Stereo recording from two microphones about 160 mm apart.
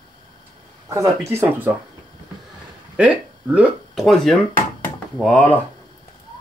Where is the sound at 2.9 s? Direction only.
5° right (ahead or behind); by 5.5 s 10° left (ahead or behind).